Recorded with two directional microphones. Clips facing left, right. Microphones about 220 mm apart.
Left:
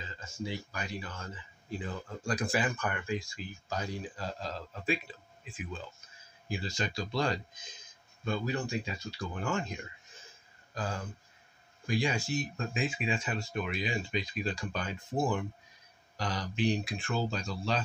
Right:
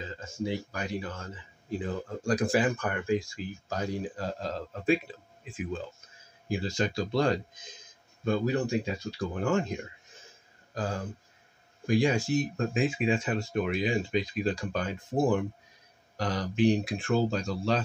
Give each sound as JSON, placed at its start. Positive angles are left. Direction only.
{"t": 0.0, "sound": "speech", "side_deg": -50}
{"t": 6.5, "sound": "speech", "side_deg": -50}
{"t": 10.7, "sound": "speech", "side_deg": -40}